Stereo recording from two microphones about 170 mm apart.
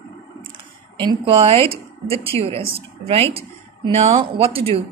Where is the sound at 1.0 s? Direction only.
30° right (ahead or behind).